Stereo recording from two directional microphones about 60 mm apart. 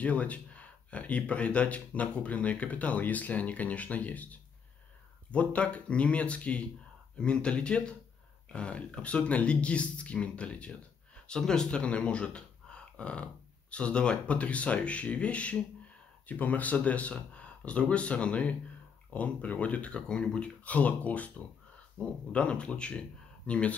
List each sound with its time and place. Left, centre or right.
0.0 s speech: left